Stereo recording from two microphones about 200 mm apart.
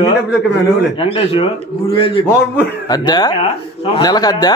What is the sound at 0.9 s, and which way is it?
Speech, 30° left (ahead or behind).